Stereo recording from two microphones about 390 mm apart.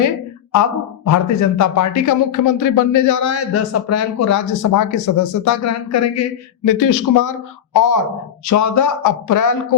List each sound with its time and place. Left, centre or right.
0.5 s speech: left